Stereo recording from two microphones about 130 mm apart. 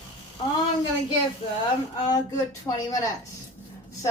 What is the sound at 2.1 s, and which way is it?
Speech, 25° left (ahead or behind).